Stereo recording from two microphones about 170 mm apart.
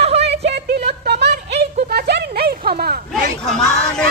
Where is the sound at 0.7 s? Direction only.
70° right (ahead or behind).